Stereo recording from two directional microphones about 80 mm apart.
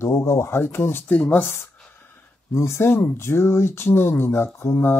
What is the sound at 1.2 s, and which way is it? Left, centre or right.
Speech, centre.